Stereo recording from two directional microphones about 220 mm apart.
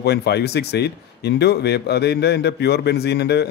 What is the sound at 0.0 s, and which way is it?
Speech, 50° left (ahead or behind).